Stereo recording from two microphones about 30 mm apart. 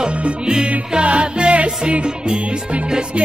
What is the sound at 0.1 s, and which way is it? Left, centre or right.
Music, right.